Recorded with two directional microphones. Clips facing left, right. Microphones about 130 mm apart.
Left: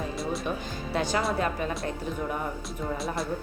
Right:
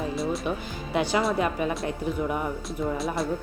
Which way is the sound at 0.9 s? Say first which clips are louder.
Right 3 dB; 15° right (ahead or behind).